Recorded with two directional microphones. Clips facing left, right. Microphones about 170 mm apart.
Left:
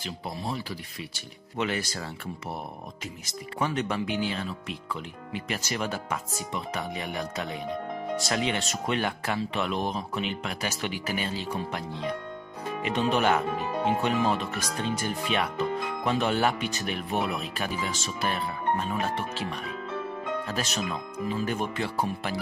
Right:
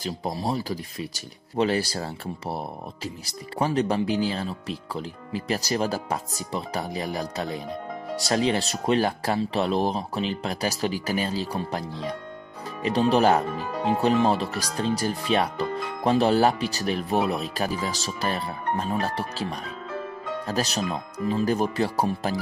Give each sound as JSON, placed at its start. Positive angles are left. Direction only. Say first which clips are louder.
{"t": 0.0, "sound": "speech", "louder": "right 6 dB", "side_deg": -40}